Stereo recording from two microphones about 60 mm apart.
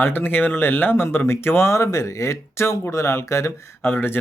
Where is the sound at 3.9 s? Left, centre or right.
Left.